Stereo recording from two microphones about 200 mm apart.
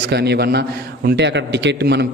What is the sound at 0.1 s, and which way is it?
Speech, 55° right (ahead or behind).